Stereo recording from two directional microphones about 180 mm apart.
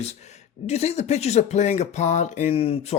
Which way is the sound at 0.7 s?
35° left (ahead or behind).